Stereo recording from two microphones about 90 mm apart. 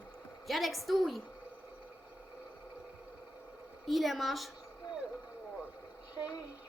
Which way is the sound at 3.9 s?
Centre (ahead or behind).